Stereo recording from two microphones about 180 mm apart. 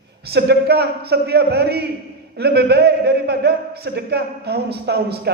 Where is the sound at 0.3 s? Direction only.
65° right (ahead or behind).